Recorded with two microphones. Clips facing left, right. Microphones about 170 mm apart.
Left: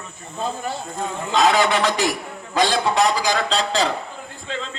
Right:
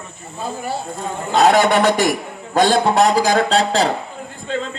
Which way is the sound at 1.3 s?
45° right (ahead or behind).